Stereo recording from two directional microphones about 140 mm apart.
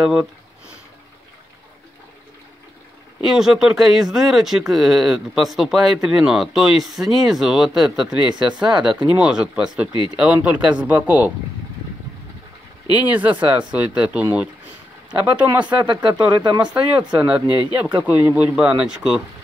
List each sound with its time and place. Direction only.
0.0 s speech: 5° right (ahead or behind)
3.3 s speech: 5° right (ahead or behind)
12.9 s speech: 10° right (ahead or behind)
17.5 s speech: 30° left (ahead or behind)
17.7 s speech: 10° right (ahead or behind)